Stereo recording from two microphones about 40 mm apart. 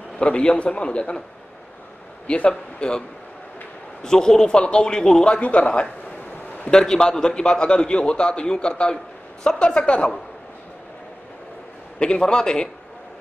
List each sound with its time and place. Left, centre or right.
0.2 s a man's voice: left
2.2 s a man's voice: left
4.0 s a man's voice: centre
5.4 s speech: left
6.6 s a man's voice: centre
12.0 s a man's voice: left